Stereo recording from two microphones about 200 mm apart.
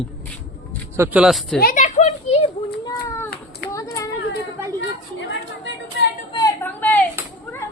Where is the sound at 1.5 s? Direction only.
45° left (ahead or behind).